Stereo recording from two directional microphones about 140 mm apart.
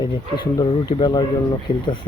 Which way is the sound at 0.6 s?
30° left (ahead or behind).